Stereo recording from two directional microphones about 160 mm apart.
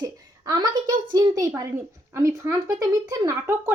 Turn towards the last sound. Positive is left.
turn(degrees=-15)  # may be behind; listen again after turning